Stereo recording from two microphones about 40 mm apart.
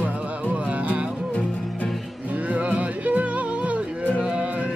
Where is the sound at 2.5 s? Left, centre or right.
Right.